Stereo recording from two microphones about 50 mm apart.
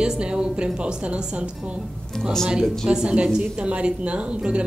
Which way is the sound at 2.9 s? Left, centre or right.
Centre.